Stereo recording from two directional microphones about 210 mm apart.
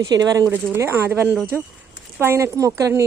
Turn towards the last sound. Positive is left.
turn(degrees=-15)  # may be behind; listen again after turning